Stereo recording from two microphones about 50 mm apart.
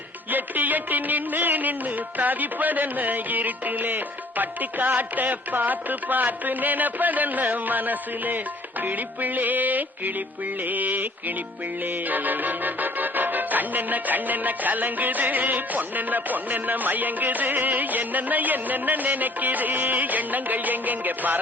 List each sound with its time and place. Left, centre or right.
0.3 s music: right